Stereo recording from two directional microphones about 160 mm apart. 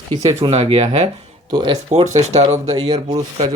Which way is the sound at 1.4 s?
25° right (ahead or behind).